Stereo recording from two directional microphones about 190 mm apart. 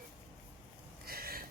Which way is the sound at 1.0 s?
50° right (ahead or behind).